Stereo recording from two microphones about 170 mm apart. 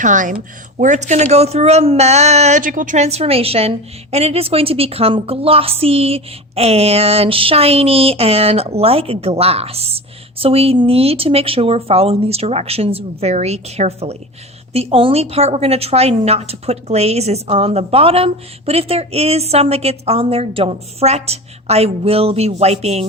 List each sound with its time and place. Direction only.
0.0 s speech: 50° right (ahead or behind)